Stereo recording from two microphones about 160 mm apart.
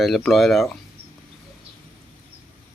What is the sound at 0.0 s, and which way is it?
Speech, centre (ahead or behind).